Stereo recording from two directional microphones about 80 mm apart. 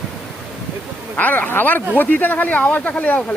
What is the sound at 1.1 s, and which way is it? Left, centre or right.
Speech, centre.